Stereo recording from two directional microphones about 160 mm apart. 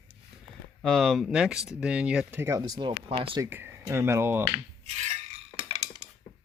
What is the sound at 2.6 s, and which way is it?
Speech, 25° right (ahead or behind).